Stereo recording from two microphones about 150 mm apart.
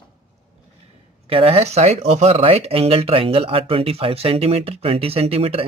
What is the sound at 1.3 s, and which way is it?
Speech, 40° right (ahead or behind).